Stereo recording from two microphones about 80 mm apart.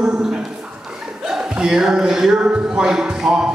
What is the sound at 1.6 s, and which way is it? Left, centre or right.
Speech, centre.